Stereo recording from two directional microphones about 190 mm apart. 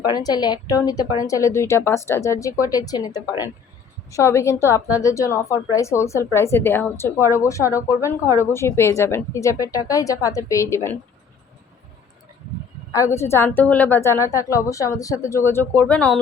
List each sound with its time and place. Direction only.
0.0 s a woman's voice: 20° left (ahead or behind)
12.9 s a woman's voice: 15° left (ahead or behind)